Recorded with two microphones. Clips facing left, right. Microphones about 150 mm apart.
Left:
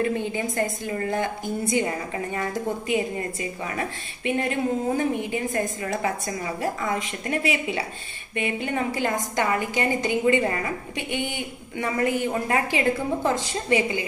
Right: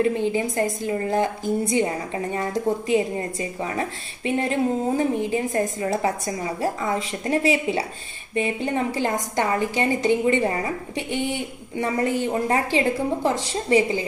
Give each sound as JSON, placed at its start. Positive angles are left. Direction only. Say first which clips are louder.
{"t": 0.0, "sound": "a woman's voice", "louder": "right 4 dB", "side_deg": -30}
{"t": 2.9, "sound": "a woman's voice", "louder": "right 3 dB", "side_deg": -30}